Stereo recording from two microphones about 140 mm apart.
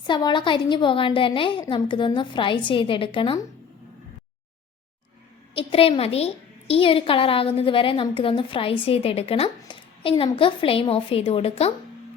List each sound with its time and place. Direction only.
0.1 s a woman's voice: 30° left (ahead or behind)
5.5 s a woman's voice: 40° left (ahead or behind)